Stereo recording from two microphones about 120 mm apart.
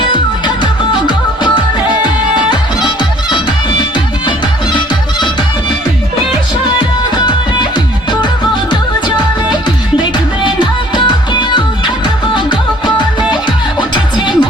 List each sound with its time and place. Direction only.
0.1 s music: 40° left (ahead or behind)
3.0 s music: 40° left (ahead or behind)
7.2 s music: 40° left (ahead or behind)
9.6 s music: 40° left (ahead or behind)